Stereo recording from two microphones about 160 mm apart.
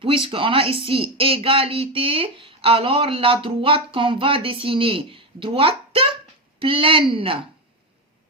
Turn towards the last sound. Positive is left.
turn(degrees=-35)  # may be behind; listen again after turning